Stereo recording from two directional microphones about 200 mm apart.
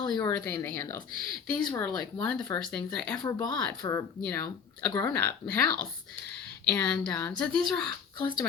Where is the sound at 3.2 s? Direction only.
20° left (ahead or behind).